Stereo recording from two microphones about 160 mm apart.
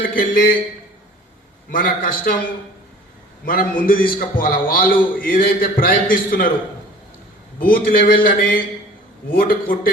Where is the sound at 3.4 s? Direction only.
65° left (ahead or behind).